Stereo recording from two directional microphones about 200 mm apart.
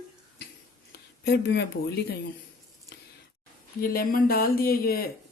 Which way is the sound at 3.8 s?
45° left (ahead or behind).